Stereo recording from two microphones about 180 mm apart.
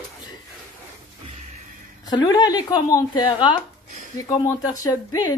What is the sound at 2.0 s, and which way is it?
A woman's voice, 25° left (ahead or behind).